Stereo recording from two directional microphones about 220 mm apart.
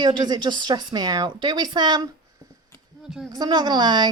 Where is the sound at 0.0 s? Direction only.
20° right (ahead or behind).